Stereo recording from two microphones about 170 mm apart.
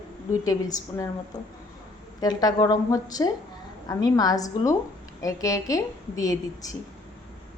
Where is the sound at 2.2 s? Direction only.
20° left (ahead or behind).